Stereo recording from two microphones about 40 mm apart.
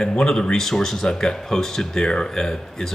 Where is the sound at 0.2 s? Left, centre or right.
Centre.